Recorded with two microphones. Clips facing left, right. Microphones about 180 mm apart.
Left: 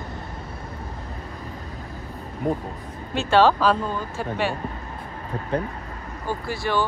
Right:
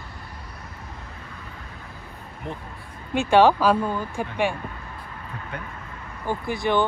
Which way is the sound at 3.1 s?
15° right (ahead or behind).